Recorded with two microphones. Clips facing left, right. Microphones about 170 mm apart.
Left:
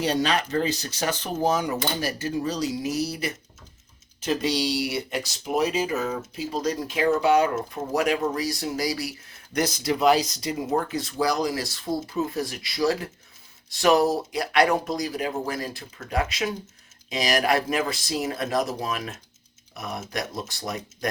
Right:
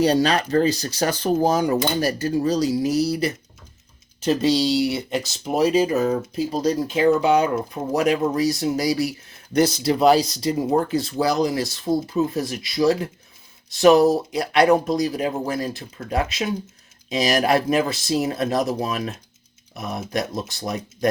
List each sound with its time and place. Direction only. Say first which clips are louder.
0.0 s speech: right 6 dB; 40° right (ahead or behind)